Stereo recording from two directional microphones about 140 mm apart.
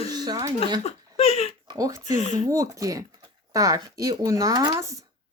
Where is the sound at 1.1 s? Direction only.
45° left (ahead or behind).